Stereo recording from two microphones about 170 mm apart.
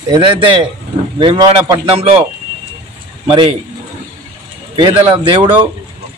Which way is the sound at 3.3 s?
30° right (ahead or behind).